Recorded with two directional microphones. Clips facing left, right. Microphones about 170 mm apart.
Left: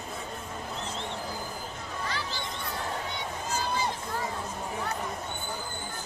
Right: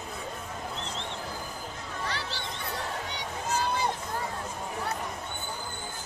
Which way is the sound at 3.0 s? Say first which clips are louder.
Even; 65° right (ahead or behind).